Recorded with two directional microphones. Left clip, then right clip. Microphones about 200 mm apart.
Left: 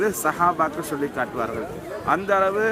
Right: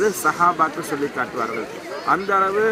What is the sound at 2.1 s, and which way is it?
Speech, 20° left (ahead or behind).